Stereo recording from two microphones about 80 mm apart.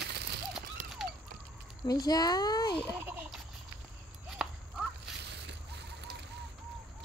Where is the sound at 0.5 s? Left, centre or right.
Centre.